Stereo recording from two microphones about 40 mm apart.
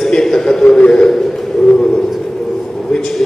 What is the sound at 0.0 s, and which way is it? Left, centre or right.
Speech, centre.